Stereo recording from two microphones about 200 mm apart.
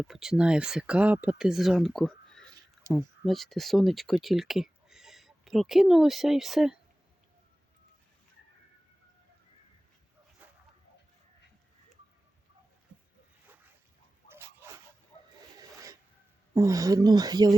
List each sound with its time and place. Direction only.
0.0 s speech: centre (ahead or behind)
10.4 s dog: 5° right (ahead or behind)
14.3 s dog: 10° right (ahead or behind)
15.5 s wild animals: 15° right (ahead or behind)
16.6 s speech: 15° right (ahead or behind)